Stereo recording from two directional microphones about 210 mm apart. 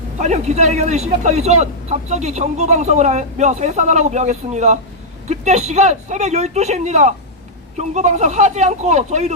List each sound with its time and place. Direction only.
0.2 s speech: 30° right (ahead or behind)